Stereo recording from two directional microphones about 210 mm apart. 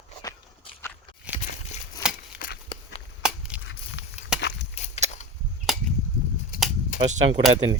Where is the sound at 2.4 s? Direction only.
40° left (ahead or behind).